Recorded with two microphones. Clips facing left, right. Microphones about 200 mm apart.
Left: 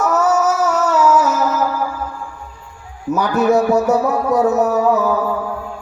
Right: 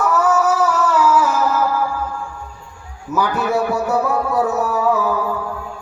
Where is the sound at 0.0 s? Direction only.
40° left (ahead or behind).